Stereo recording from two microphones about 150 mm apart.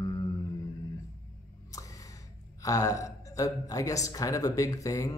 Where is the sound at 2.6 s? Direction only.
25° left (ahead or behind).